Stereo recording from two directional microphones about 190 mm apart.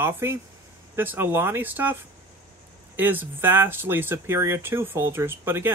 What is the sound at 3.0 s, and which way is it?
Speech, 10° right (ahead or behind).